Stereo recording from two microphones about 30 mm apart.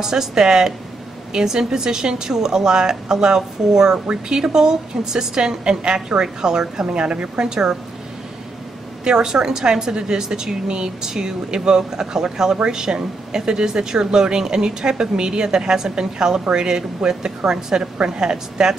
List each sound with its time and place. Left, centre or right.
0.0 s speech: centre
9.0 s speech: right
17.4 s a woman's voice: centre
18.0 s speech: right